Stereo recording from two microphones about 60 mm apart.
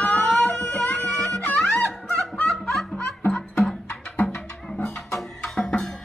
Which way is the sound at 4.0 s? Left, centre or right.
Centre.